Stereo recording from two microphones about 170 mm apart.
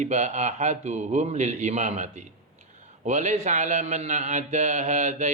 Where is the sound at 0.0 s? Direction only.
45° right (ahead or behind).